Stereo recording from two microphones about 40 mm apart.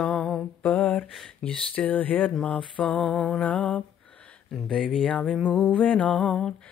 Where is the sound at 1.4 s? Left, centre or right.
Left.